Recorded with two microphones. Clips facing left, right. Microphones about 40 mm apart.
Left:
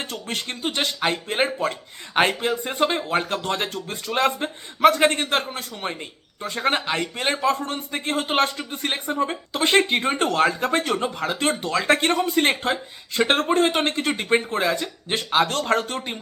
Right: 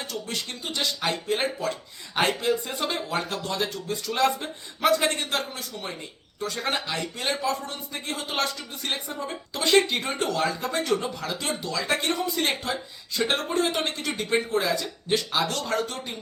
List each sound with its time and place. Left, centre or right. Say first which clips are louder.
0.0 s speech: left 3 dB; left
6.4 s speech: left 5 dB; left